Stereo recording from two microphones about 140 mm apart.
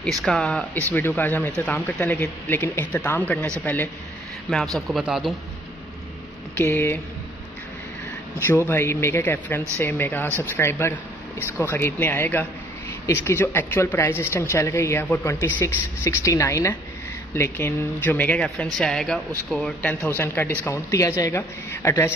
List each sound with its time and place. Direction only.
0.0 s a man's voice: 5° left (ahead or behind)
6.5 s speech: 15° left (ahead or behind)
8.5 s a woman's voice: 15° left (ahead or behind)